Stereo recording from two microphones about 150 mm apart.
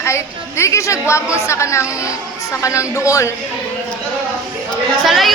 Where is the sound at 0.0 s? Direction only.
20° left (ahead or behind).